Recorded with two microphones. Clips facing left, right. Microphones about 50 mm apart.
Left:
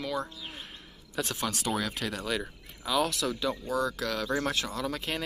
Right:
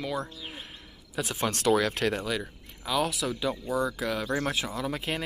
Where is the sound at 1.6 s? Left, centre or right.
Right.